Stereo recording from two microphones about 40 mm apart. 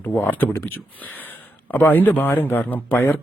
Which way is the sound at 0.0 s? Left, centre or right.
Left.